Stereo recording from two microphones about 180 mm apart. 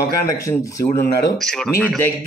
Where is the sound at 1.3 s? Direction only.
Centre (ahead or behind).